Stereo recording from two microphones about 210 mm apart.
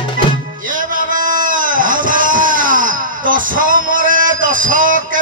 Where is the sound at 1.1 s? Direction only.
40° right (ahead or behind).